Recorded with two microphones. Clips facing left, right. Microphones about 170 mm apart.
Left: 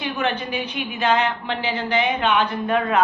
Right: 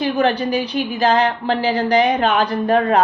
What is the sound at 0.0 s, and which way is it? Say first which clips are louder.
A woman's voice: right 7 dB; 35° right (ahead or behind).